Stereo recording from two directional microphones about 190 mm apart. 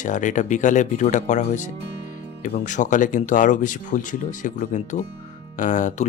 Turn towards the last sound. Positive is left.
turn(degrees=40)  # may be behind; listen again after turning